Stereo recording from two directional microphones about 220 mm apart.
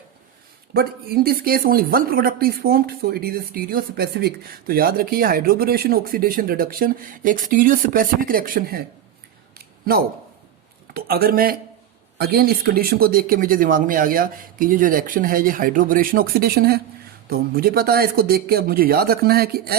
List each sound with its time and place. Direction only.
0.7 s speech: 45° right (ahead or behind)
9.6 s a sound: 40° right (ahead or behind)
10.9 s speech: 45° right (ahead or behind)